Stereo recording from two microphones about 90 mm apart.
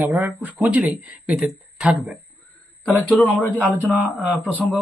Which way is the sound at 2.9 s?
20° left (ahead or behind).